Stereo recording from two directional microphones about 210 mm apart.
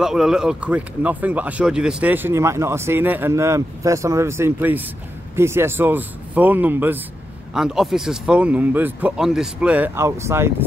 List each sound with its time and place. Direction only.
0.0 s speech: centre (ahead or behind)